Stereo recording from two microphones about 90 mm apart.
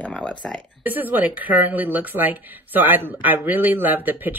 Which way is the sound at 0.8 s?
20° right (ahead or behind).